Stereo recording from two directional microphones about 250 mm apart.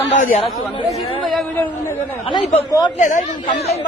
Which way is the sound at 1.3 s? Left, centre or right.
Centre.